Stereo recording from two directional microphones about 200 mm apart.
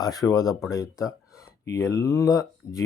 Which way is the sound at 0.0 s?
20° left (ahead or behind).